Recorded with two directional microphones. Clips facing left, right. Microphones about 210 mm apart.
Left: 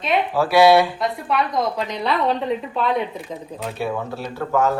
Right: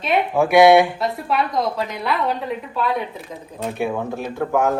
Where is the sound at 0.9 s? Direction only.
Centre (ahead or behind).